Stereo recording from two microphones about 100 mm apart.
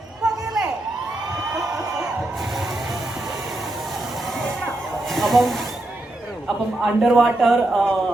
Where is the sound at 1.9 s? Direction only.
5° right (ahead or behind).